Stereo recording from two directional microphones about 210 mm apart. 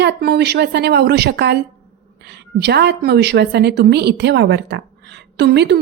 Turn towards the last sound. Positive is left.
turn(degrees=-55)  # may be behind; listen again after turning